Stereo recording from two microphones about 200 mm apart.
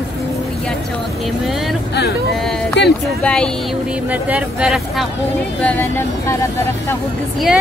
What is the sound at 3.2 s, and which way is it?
Speech, 5° left (ahead or behind).